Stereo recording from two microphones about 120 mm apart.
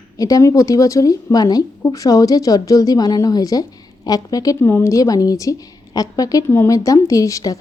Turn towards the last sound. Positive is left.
turn(degrees=30)  # may be behind; listen again after turning